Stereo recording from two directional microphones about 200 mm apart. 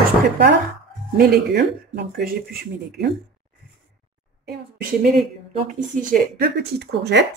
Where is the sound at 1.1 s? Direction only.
50° right (ahead or behind).